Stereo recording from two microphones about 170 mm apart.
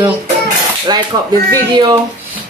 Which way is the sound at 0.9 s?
25° right (ahead or behind).